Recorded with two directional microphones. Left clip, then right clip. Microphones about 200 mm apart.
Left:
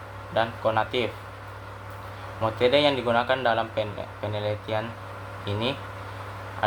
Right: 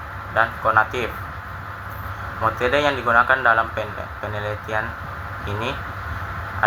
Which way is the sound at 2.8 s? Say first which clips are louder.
Right 5 dB; 15° left (ahead or behind).